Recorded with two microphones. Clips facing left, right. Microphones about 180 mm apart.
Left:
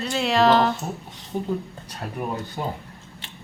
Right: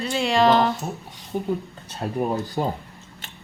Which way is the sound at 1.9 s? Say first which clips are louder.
Right 5 dB; 30° right (ahead or behind).